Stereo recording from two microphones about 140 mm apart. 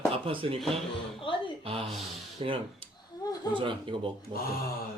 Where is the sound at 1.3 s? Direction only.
35° left (ahead or behind).